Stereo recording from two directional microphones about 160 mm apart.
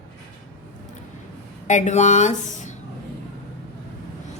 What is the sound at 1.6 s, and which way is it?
A woman's voice, 50° left (ahead or behind).